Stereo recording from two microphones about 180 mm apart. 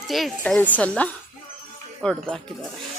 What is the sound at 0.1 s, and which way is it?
A woman's voice, centre (ahead or behind).